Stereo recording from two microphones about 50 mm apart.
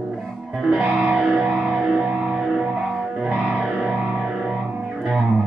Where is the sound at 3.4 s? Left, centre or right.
Centre.